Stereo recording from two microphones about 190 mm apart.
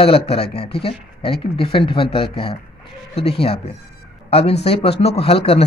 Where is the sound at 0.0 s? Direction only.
30° left (ahead or behind).